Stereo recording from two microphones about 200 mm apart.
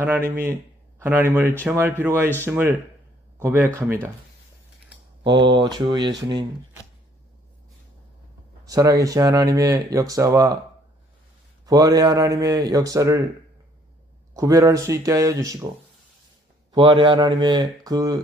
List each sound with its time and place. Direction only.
0.4 s speech: 10° right (ahead or behind)
5.5 s speech: 20° right (ahead or behind)
8.6 s speech: 15° right (ahead or behind)
11.6 s speech: 20° right (ahead or behind)
14.3 s speech: 15° right (ahead or behind)
16.7 s speech: 20° right (ahead or behind)